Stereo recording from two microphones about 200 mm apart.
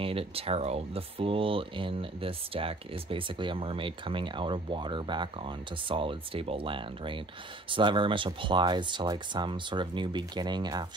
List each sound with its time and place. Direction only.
0.0 s speech: 30° right (ahead or behind)